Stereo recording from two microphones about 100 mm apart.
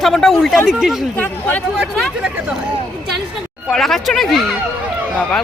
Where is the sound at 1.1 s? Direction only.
15° left (ahead or behind).